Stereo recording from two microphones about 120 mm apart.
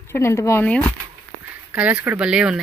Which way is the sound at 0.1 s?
25° left (ahead or behind).